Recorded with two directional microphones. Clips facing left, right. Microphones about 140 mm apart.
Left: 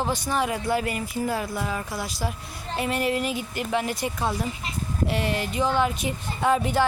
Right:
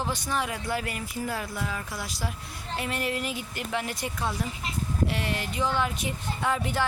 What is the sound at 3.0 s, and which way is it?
Speech, 10° left (ahead or behind).